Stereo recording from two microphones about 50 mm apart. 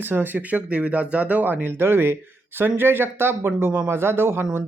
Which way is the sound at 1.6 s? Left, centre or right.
Right.